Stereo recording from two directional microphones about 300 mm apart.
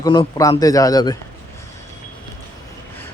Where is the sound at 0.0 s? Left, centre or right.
Centre.